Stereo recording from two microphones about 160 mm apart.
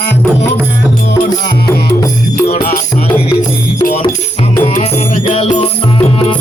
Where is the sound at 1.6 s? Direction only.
20° left (ahead or behind).